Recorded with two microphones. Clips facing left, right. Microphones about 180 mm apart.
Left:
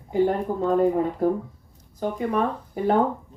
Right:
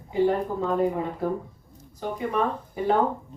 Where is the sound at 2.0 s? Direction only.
50° left (ahead or behind).